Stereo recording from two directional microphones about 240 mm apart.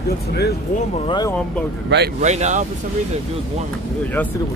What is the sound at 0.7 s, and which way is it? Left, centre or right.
Speech, centre.